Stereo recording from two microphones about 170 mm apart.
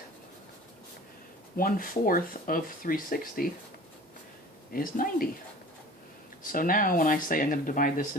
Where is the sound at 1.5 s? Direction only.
55° left (ahead or behind).